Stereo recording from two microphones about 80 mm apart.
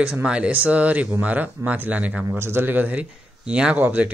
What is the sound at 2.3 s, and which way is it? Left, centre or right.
Speech, right.